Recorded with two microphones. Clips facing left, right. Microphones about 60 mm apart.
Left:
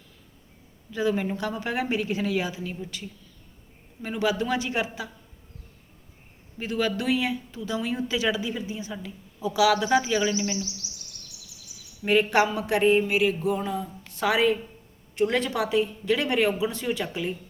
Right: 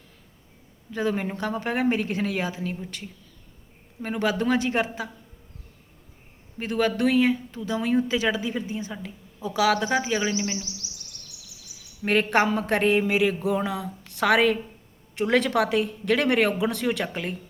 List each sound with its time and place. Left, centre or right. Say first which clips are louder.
0.9 s speech: left 1 dB; right
4.0 s speech: right 1 dB; right
6.6 s speech: right 4 dB; right
12.0 s speech: even; right
12.8 s a woman's voice: left 3 dB; right
13.6 s a woman's voice: right 1 dB; right